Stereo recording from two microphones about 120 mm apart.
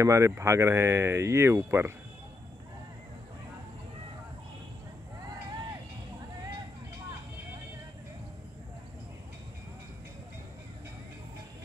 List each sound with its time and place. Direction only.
0.0 s speech: 25° right (ahead or behind)